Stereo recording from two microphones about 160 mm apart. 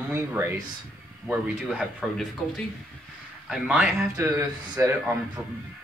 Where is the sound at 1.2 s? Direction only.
Centre (ahead or behind).